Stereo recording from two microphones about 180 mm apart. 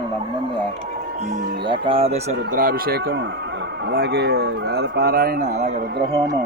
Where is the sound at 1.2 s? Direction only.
40° right (ahead or behind).